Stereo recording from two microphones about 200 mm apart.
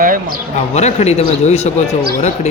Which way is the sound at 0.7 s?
35° left (ahead or behind).